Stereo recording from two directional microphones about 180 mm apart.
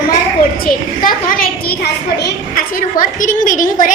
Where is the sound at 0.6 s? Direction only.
55° left (ahead or behind).